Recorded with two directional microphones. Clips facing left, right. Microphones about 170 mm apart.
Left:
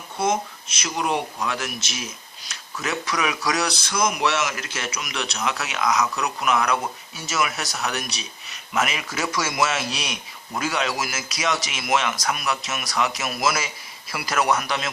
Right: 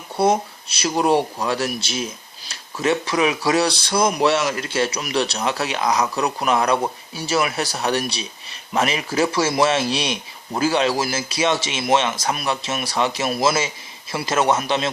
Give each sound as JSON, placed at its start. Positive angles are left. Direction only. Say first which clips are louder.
{"t": 0.2, "sound": "speech", "louder": "right 5 dB", "side_deg": -35}